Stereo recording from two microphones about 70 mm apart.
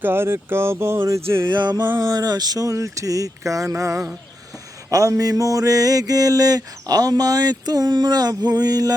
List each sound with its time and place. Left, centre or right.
0.0 s speech: right
1.5 s music: right
2.0 s speech: right
4.9 s mantra: right